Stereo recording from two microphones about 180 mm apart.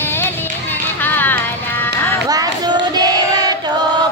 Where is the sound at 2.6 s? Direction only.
20° right (ahead or behind).